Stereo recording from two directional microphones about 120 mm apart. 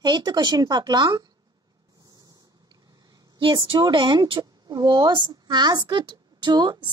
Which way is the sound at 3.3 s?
45° right (ahead or behind).